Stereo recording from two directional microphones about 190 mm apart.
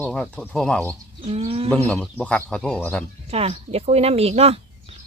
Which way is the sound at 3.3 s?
30° right (ahead or behind).